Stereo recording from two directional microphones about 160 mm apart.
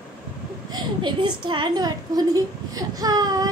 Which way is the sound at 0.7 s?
30° right (ahead or behind).